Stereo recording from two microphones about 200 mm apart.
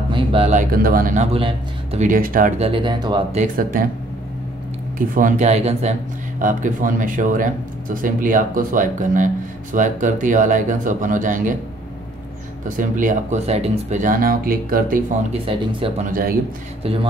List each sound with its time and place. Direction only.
0.1 s speech: 30° right (ahead or behind); by 2.5 s 45° right (ahead or behind)
2.6 s speech: 25° right (ahead or behind)
3.3 s speech: 45° right (ahead or behind)
4.9 s speech: 45° right (ahead or behind)
12.6 s speech: 40° right (ahead or behind)
15.4 s speech: 25° right (ahead or behind)
16.1 s speech: 45° right (ahead or behind)
16.8 s speech: 25° right (ahead or behind)